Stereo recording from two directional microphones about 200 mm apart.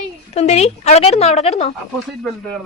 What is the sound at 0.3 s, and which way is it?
A woman's voice, 35° left (ahead or behind).